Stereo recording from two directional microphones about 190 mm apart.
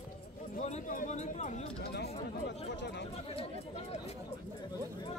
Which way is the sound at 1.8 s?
60° left (ahead or behind).